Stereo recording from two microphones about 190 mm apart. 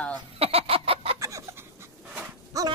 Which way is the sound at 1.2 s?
15° right (ahead or behind).